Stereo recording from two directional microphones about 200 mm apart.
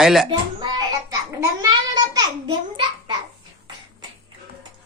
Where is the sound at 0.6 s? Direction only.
20° right (ahead or behind).